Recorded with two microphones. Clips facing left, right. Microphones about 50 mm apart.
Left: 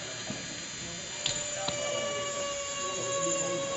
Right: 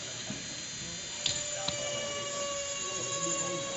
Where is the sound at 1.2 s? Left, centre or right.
Centre.